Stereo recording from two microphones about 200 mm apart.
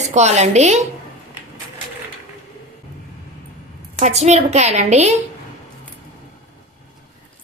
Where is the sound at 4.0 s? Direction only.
35° right (ahead or behind).